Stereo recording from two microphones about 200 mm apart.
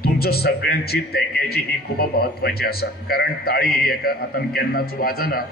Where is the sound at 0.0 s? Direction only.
50° left (ahead or behind).